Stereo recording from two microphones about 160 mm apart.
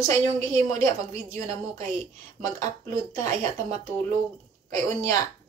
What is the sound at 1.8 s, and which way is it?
Speech, 45° right (ahead or behind).